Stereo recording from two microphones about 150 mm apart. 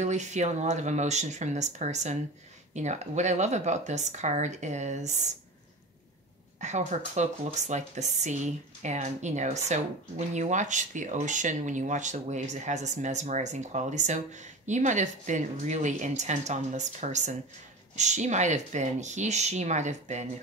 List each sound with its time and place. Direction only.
0.0 s speech: 50° right (ahead or behind)
6.6 s speech: 50° right (ahead or behind)